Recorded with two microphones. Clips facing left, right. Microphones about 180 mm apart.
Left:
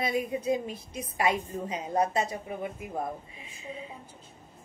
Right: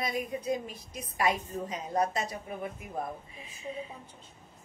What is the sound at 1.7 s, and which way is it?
Speech, 25° left (ahead or behind).